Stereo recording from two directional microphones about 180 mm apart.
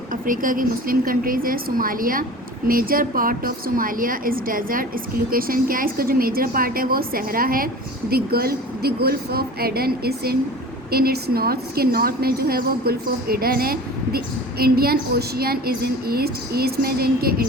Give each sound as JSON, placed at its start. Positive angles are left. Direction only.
{"t": 0.1, "sound": "a woman's voice", "side_deg": -50}